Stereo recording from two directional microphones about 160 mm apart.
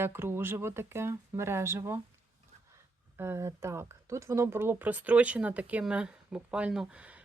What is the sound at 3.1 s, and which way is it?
Speech, 15° right (ahead or behind).